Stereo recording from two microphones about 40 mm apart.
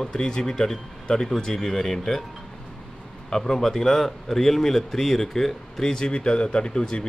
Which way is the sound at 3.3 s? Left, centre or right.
Centre.